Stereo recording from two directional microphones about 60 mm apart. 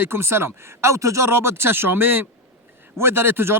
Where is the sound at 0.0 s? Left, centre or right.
Right.